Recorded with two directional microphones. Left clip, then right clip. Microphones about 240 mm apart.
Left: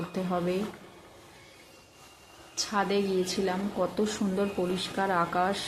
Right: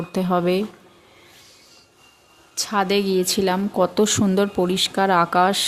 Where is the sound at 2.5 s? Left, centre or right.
Right.